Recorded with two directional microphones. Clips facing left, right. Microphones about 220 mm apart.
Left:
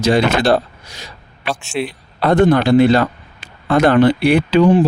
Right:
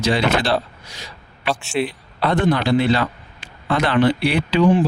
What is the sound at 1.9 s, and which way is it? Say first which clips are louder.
Speech: left 5 dB; 45° left (ahead or behind).